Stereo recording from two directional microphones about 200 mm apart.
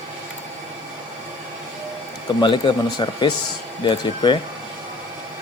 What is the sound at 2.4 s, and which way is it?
Speech, 25° left (ahead or behind).